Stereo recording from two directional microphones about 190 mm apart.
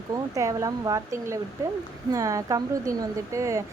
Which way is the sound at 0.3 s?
15° right (ahead or behind).